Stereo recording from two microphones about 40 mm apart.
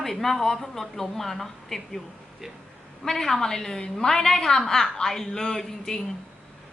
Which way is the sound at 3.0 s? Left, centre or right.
Centre.